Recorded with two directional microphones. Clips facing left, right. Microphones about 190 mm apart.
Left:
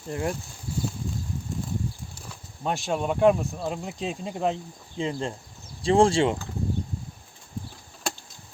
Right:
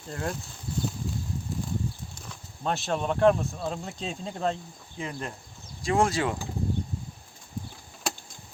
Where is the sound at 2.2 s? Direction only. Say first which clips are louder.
Left 1 dB; 10° left (ahead or behind).